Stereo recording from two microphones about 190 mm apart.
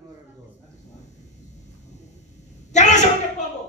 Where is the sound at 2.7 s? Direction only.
40° left (ahead or behind).